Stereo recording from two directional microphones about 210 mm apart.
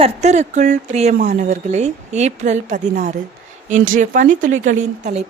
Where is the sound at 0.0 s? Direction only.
30° right (ahead or behind).